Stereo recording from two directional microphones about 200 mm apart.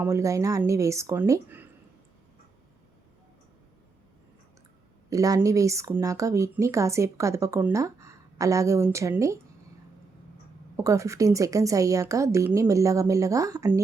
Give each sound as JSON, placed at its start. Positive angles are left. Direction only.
{"t": 0.0, "sound": "speech", "side_deg": -15}
{"t": 5.0, "sound": "speech", "side_deg": -15}
{"t": 10.8, "sound": "speech", "side_deg": -15}